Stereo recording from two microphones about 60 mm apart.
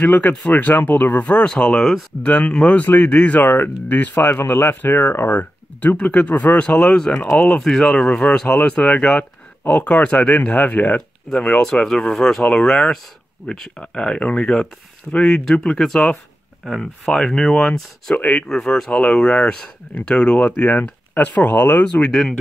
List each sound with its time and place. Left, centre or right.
0.0 s speech: left
1.2 s speech: left
2.2 s speech: left
4.3 s a man's voice: left
7.6 s speech: centre; by 11.0 s left
11.4 s speech: centre
18.1 s speech: left
18.5 s speech: centre; by 21.8 s left
21.8 s speech: centre